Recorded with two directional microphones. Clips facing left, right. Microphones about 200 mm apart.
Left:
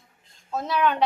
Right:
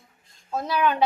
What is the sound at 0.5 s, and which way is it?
Speech, centre (ahead or behind).